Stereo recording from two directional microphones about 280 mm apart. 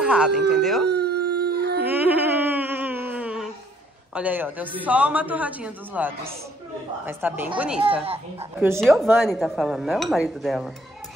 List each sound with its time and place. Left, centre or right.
0.0 s speech: centre
0.8 s howl: right
1.9 s a sound: centre
4.1 s speech: centre
8.0 s speech: right
8.5 s speech: centre